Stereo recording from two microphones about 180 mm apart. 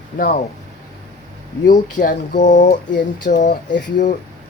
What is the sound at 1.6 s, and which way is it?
Speech, 45° left (ahead or behind).